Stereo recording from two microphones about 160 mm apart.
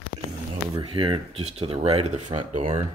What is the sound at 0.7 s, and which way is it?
Speech, 35° right (ahead or behind).